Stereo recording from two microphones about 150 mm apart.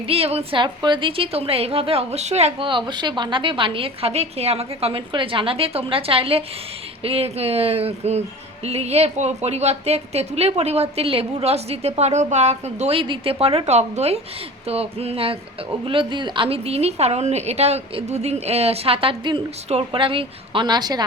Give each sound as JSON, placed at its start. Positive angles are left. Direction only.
{"t": 0.1, "sound": "a woman's voice", "side_deg": -40}